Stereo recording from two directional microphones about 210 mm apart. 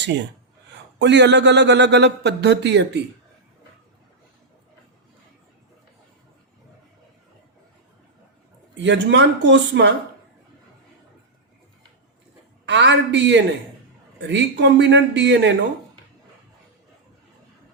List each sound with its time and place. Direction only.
0.0 s speech: 55° right (ahead or behind)
8.7 s speech: 60° right (ahead or behind)
12.6 s speech: 55° right (ahead or behind)